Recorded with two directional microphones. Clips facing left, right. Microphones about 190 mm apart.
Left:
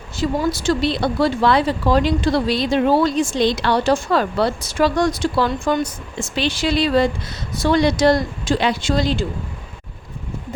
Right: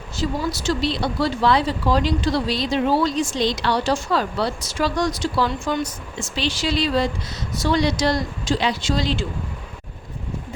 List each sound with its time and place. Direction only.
0.2 s speech: 55° left (ahead or behind)